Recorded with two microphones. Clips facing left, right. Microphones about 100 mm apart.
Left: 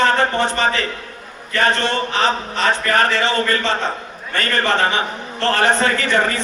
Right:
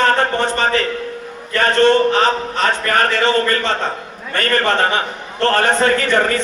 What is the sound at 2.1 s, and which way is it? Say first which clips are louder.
A man's voice: right 3 dB; 45° right (ahead or behind).